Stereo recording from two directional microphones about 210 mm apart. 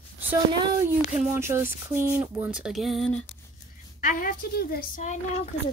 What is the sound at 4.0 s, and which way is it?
Speech, 40° left (ahead or behind).